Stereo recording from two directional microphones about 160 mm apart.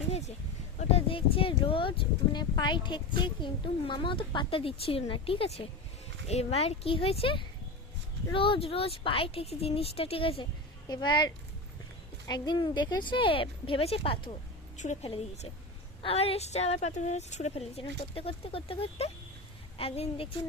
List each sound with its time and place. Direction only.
0.1 s a sound: 45° left (ahead or behind)
0.8 s speech: 40° left (ahead or behind)
12.3 s speech: 30° left (ahead or behind)
14.8 s a woman's voice: 50° left (ahead or behind)
15.1 s a woman's voice: 35° left (ahead or behind)